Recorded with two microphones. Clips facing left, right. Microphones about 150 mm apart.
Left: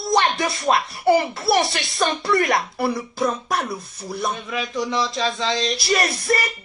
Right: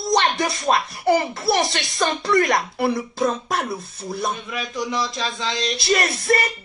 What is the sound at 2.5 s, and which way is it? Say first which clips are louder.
Speech: right 1 dB; 50° right (ahead or behind).